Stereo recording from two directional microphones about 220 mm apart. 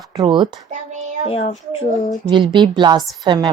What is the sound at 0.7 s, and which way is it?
Child singing, 35° right (ahead or behind).